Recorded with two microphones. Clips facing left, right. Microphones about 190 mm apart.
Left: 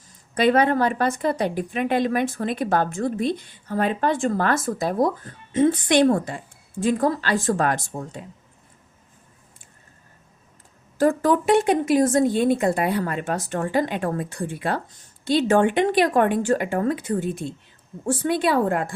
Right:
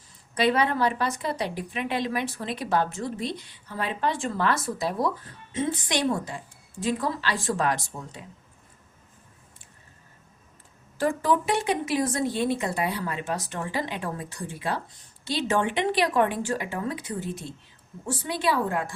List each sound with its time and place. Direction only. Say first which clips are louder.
0.3 s a woman's voice: left 5 dB; 50° left (ahead or behind)
10.9 s a woman's voice: left 5 dB; 45° left (ahead or behind)